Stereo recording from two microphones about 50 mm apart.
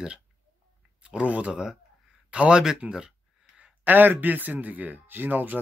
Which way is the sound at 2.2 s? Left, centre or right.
Centre.